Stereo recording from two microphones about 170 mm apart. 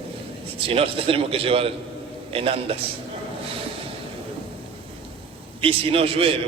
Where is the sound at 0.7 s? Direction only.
35° right (ahead or behind).